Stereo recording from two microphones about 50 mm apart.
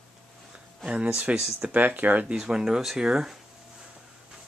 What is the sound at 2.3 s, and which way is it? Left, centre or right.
Speech, centre.